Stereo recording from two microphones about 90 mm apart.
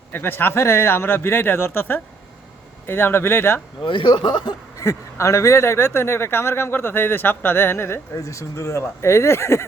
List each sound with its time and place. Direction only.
0.1 s speech: 25° left (ahead or behind)
3.8 s speech: 65° left (ahead or behind)
4.8 s speech: 35° left (ahead or behind)